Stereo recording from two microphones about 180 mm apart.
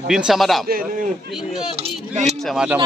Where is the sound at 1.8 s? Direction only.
35° right (ahead or behind).